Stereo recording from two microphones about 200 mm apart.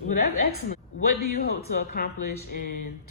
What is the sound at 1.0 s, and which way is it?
Speech, 50° left (ahead or behind).